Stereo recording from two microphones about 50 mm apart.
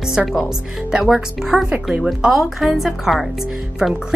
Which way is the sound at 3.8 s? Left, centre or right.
Centre.